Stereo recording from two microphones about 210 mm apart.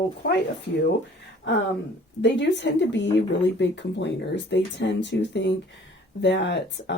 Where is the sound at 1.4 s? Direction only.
60° left (ahead or behind).